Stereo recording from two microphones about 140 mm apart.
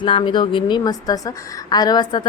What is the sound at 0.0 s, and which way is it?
A woman's voice, 35° left (ahead or behind).